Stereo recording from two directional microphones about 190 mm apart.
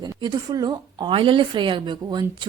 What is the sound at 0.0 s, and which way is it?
A woman's voice, 20° right (ahead or behind).